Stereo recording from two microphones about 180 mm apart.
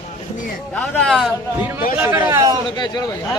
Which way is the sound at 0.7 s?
5° left (ahead or behind).